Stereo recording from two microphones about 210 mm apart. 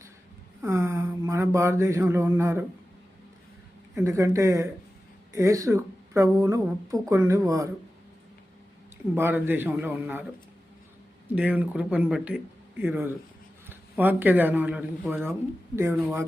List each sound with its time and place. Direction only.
0.6 s speech: 10° right (ahead or behind)
4.0 s a man's voice: 15° right (ahead or behind)
9.1 s a man's voice: 10° right (ahead or behind)
11.3 s a man's voice: 5° right (ahead or behind)